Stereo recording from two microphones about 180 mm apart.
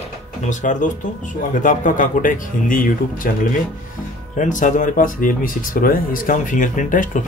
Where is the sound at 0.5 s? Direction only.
40° left (ahead or behind).